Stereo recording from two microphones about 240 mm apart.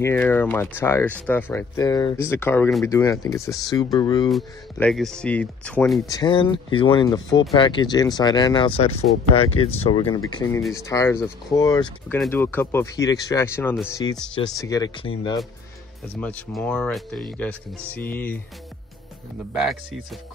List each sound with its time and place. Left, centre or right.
0.0 s speech: centre
4.3 s speech: centre
6.0 s speech: centre
16.2 s speech: centre
19.5 s speech: centre